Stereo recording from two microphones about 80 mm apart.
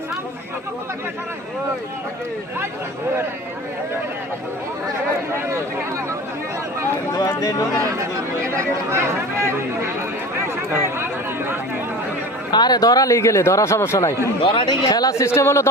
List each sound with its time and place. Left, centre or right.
7.2 s speech: left
8.4 s speech: right
10.8 s a sound: right
12.5 s a man's voice: left
14.4 s speech: left
14.8 s speech: left
15.4 s a man's voice: left